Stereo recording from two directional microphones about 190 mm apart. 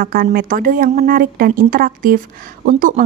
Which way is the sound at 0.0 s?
50° right (ahead or behind).